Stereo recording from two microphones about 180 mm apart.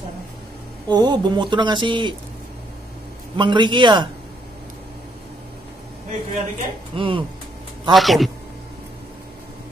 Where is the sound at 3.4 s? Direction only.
25° right (ahead or behind).